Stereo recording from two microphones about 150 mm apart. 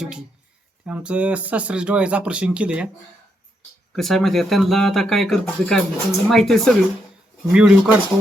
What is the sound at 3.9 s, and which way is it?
Speech, centre (ahead or behind).